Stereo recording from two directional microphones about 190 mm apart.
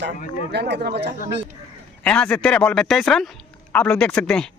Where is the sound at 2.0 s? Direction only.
5° left (ahead or behind).